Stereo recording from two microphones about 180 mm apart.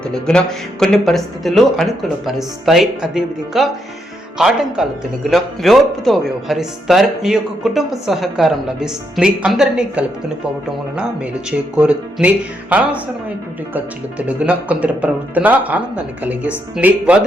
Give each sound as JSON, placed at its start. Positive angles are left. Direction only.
{"t": 0.1, "sound": "speech", "side_deg": 5}
{"t": 11.7, "sound": "speech", "side_deg": -5}
{"t": 13.7, "sound": "speech", "side_deg": -10}